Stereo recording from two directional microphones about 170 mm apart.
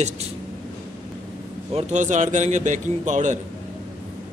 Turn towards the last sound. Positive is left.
turn(degrees=-45)  # may be behind; listen again after turning